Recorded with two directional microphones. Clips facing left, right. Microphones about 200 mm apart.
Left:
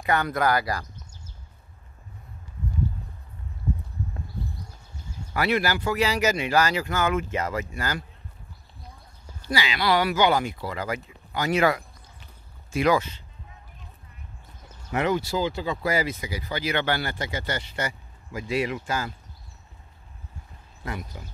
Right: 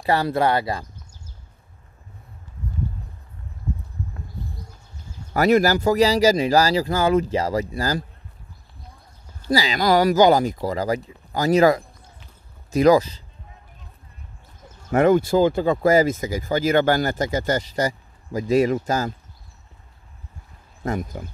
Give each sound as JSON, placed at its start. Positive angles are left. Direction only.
{"t": 0.0, "sound": "speech", "side_deg": -30}
{"t": 5.3, "sound": "speech", "side_deg": -40}
{"t": 9.5, "sound": "speech", "side_deg": -40}
{"t": 14.9, "sound": "speech", "side_deg": -50}
{"t": 20.8, "sound": "speech", "side_deg": -45}